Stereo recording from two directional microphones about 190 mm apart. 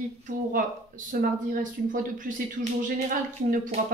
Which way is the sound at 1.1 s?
50° right (ahead or behind).